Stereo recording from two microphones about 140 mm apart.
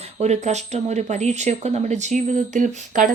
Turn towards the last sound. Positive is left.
turn(degrees=-65)  # may be behind; listen again after turning